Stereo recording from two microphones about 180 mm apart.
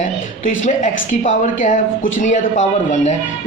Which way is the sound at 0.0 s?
45° left (ahead or behind).